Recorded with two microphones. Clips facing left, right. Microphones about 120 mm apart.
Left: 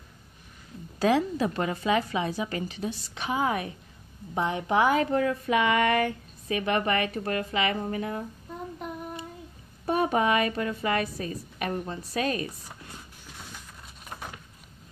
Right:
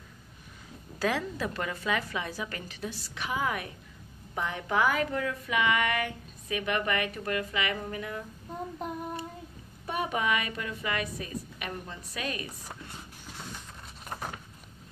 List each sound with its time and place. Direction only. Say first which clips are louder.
0.9 s a woman's voice: left 6 dB; 25° left (ahead or behind)
9.8 s speech: left 6 dB; 40° left (ahead or behind)